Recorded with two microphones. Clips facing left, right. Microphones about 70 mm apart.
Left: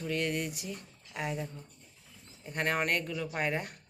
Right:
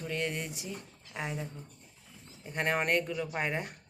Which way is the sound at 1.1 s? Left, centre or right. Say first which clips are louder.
Left 1 dB; centre.